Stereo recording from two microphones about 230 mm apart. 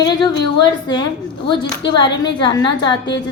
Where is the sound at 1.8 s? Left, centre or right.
Left.